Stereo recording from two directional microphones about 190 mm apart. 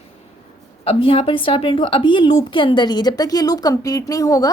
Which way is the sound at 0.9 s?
30° left (ahead or behind).